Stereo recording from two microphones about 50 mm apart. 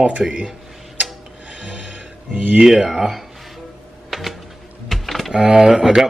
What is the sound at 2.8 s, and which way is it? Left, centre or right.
Speech, centre.